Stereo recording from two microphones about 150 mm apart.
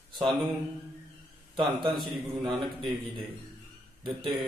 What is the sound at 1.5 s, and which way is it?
A man's voice, 30° right (ahead or behind).